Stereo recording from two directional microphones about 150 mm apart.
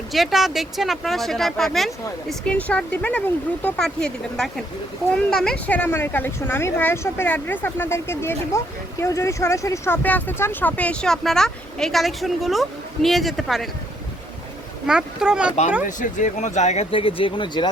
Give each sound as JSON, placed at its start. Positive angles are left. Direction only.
{"t": 0.1, "sound": "speech", "side_deg": 0}
{"t": 14.8, "sound": "speech", "side_deg": -5}
{"t": 16.0, "sound": "speech", "side_deg": 55}